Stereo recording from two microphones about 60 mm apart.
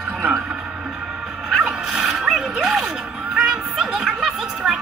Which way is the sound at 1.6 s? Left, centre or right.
Centre.